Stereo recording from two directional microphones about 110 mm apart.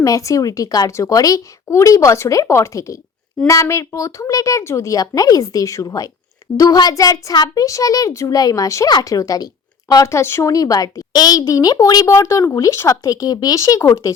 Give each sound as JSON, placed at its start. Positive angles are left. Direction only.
{"t": 0.0, "sound": "a child's voice", "side_deg": 30}